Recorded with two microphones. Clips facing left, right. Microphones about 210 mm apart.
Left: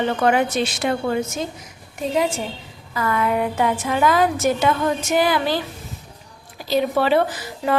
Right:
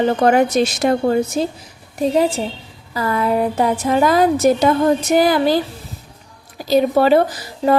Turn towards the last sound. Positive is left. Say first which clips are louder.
# right 5 dB
turn(degrees=-40)  # may be behind; listen again after turning